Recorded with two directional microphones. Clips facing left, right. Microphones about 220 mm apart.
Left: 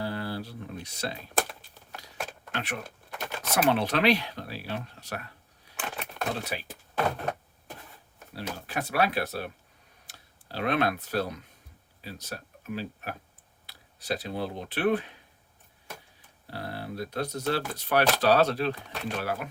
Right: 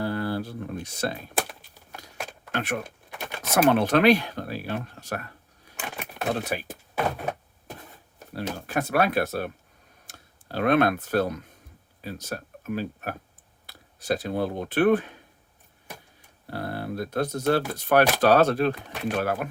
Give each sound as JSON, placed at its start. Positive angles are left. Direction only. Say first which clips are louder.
{"t": 0.0, "sound": "a sound", "louder": "right 5 dB", "side_deg": -50}
{"t": 1.3, "sound": "typing", "louder": "even", "side_deg": 0}
{"t": 2.5, "sound": "speech", "louder": "right 8 dB", "side_deg": -50}
{"t": 5.7, "sound": "a sound", "louder": "even", "side_deg": -50}
{"t": 6.4, "sound": "speech", "louder": "right 5 dB", "side_deg": -50}
{"t": 6.9, "sound": "power windows", "louder": "right 1 dB", "side_deg": -10}
{"t": 8.4, "sound": "speech", "louder": "right 5 dB", "side_deg": -50}
{"t": 16.5, "sound": "speech", "louder": "right 5 dB", "side_deg": -50}